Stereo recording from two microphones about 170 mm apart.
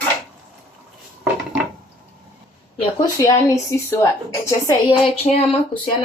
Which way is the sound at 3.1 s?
20° left (ahead or behind).